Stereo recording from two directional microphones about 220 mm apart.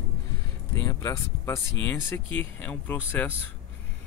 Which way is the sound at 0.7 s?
15° left (ahead or behind).